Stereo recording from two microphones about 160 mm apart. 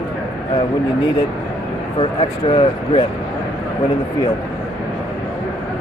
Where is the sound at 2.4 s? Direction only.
35° left (ahead or behind).